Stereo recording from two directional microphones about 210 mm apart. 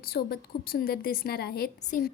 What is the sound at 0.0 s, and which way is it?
A woman's voice, 45° left (ahead or behind).